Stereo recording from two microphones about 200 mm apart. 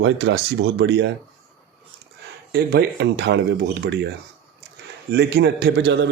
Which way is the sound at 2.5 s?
55° right (ahead or behind).